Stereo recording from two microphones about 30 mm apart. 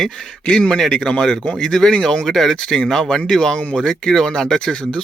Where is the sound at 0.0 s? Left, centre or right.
Left.